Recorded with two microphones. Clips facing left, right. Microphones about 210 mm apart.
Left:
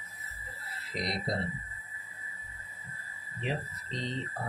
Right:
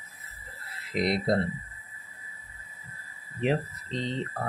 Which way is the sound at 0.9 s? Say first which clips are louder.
Right 9 dB; 65° right (ahead or behind).